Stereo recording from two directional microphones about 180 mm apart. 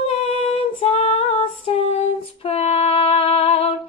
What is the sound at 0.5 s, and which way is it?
Female singing, 35° left (ahead or behind).